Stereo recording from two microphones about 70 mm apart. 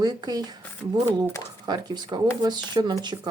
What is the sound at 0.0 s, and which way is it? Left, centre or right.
Speech, right.